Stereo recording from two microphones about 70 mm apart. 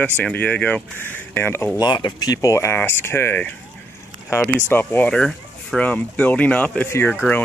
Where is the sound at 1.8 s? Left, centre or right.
Left.